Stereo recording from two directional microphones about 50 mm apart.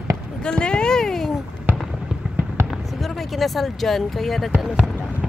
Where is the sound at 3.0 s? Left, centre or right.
Centre.